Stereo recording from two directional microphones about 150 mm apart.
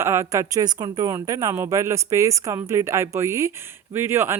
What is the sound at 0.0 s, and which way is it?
Speech, 20° right (ahead or behind).